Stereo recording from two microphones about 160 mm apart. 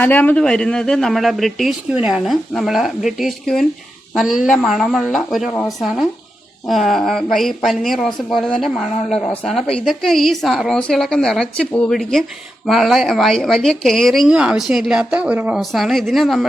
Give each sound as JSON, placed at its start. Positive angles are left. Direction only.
{"t": 0.0, "sound": "a woman's voice", "side_deg": 10}